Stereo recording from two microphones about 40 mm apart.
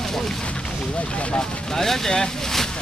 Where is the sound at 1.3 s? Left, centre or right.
Centre.